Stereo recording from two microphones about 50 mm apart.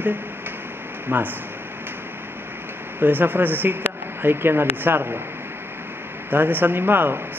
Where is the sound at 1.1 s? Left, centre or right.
Right.